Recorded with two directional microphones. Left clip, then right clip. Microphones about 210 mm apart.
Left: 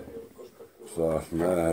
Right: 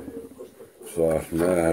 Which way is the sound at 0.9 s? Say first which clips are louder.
Right 5 dB; 5° right (ahead or behind).